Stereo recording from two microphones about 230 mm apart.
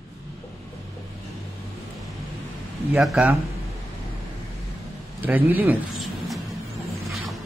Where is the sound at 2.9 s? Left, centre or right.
Centre.